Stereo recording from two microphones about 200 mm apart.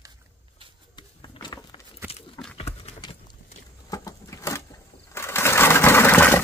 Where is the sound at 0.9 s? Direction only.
20° left (ahead or behind).